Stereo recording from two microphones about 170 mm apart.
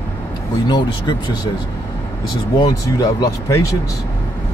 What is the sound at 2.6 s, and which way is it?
Speech, 20° left (ahead or behind).